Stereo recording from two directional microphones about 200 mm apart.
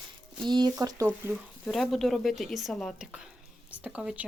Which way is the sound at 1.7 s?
Centre (ahead or behind).